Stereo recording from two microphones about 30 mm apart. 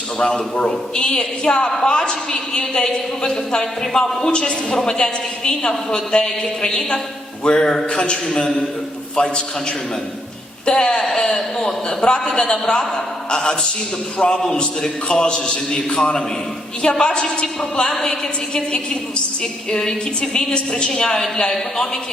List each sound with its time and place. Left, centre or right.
0.2 s a woman's voice: left
10.7 s a woman's voice: left
19.8 s a woman's voice: left